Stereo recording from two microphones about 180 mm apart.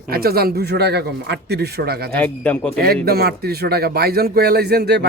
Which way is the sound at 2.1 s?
10° left (ahead or behind).